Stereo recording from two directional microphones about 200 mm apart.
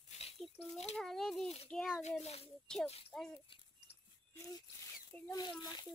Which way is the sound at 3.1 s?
Centre (ahead or behind).